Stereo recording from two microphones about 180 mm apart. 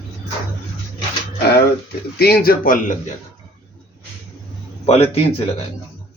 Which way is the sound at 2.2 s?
60° left (ahead or behind).